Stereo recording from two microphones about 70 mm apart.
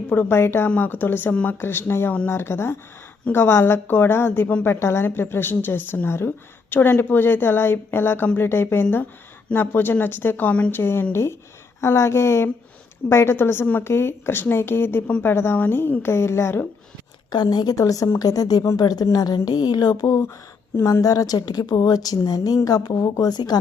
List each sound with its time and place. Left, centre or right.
0.1 s a woman's voice: left
17.3 s a woman's voice: left
17.7 s a woman's voice: left
18.8 s a sound: left
20.1 s a woman's voice: left
20.8 s a woman's voice: left
23.0 s speech: left
23.3 s a woman's voice: left